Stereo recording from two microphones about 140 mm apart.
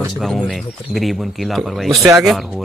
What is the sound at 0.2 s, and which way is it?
Speech, centre (ahead or behind).